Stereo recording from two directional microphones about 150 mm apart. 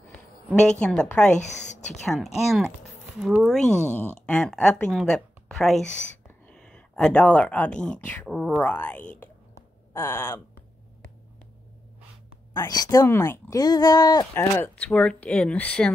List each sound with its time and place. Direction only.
0.1 s a woman's voice: 5° left (ahead or behind)
1.4 s speech: 50° left (ahead or behind)
2.3 s a woman's voice: 5° right (ahead or behind); by 10.4 s 20° left (ahead or behind)
12.5 s speech: 25° left (ahead or behind)
14.3 s speech: 10° left (ahead or behind)